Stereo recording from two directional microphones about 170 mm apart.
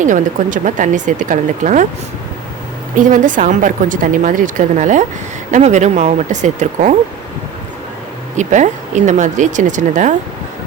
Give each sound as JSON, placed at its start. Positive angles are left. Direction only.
{"t": 0.0, "sound": "speech", "side_deg": -50}
{"t": 3.0, "sound": "speech", "side_deg": -50}
{"t": 8.4, "sound": "speech", "side_deg": -45}